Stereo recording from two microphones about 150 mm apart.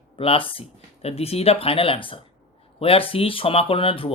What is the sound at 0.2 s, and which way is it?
Speech, 40° left (ahead or behind).